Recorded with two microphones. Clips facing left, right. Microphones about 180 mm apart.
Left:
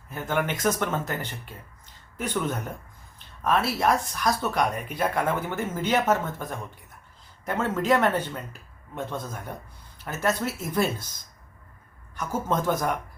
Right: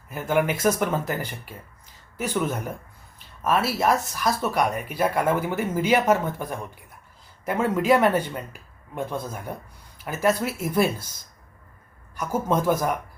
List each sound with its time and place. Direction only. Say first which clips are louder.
0.1 s speech: right 4 dB; 10° right (ahead or behind)
12.1 s speech: right 3 dB; 10° right (ahead or behind)